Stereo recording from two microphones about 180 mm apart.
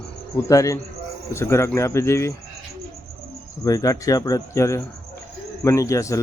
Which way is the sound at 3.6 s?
20° left (ahead or behind).